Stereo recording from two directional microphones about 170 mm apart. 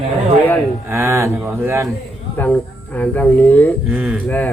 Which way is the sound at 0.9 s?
15° right (ahead or behind).